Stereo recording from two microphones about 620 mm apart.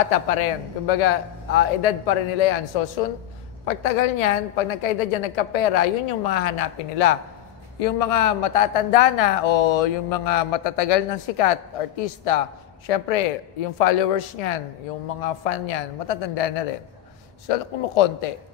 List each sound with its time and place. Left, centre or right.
0.1 s a woman's voice: left